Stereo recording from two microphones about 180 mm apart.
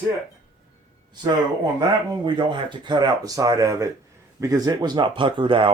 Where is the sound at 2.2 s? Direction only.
25° right (ahead or behind).